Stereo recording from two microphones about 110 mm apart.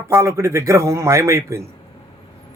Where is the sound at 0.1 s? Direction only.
25° right (ahead or behind).